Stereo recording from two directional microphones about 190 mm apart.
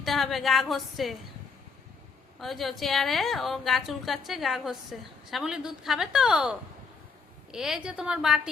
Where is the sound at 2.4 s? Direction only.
Centre (ahead or behind).